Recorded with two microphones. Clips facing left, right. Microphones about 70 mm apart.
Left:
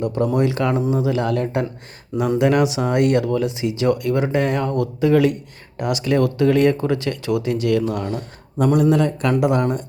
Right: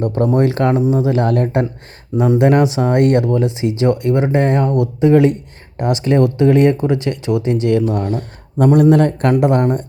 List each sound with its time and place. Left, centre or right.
0.0 s speech: right
8.0 s speech: right